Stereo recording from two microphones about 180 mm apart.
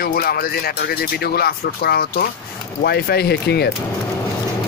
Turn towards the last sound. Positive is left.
turn(degrees=65)  # may be behind; listen again after turning